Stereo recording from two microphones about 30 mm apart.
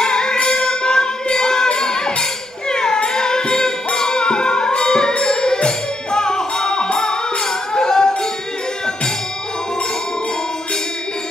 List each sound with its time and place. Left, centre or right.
0.0 s music: left